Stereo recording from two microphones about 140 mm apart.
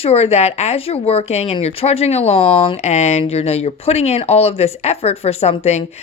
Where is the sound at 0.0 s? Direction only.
50° left (ahead or behind).